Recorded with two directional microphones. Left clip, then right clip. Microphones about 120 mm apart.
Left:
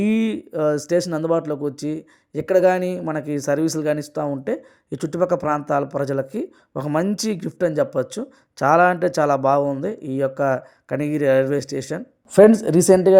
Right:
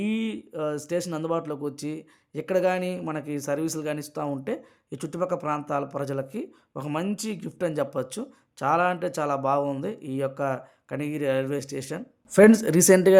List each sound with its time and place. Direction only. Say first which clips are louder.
0.0 s speech: left 8 dB; 50° left (ahead or behind)
7.6 s speech: left 7 dB; 30° left (ahead or behind)
8.5 s speech: left 8 dB; 45° left (ahead or behind)
12.3 s speech: left 5 dB; 10° left (ahead or behind)